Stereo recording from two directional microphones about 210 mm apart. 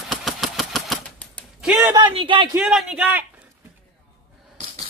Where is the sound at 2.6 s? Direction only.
5° right (ahead or behind).